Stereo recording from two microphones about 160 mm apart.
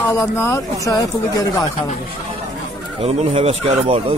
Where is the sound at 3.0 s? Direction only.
40° right (ahead or behind).